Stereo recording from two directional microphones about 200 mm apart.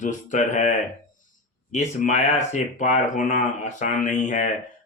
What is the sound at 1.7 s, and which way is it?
Speech, 35° left (ahead or behind).